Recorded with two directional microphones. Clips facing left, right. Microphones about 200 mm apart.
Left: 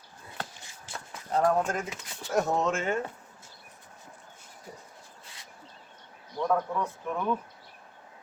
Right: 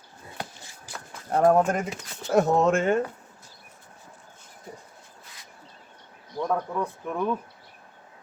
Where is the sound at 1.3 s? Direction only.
55° right (ahead or behind).